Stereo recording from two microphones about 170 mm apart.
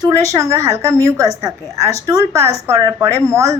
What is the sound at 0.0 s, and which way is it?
A woman's voice, 20° right (ahead or behind).